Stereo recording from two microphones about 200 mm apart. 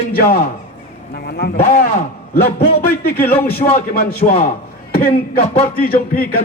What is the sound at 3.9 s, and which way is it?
A man's voice, 50° left (ahead or behind).